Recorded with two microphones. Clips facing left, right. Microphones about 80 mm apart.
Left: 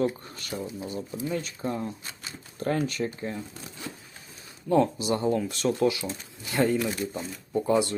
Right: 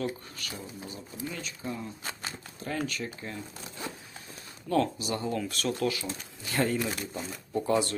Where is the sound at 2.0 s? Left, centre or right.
Right.